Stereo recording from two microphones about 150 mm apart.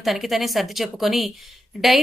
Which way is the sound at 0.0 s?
Centre (ahead or behind).